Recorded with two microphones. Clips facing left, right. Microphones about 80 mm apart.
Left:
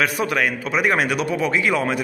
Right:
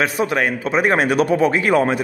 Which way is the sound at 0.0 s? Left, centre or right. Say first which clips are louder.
Right 2 dB; right.